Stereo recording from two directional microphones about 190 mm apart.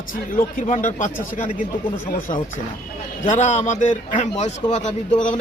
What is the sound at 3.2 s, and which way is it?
A man's voice, 40° left (ahead or behind).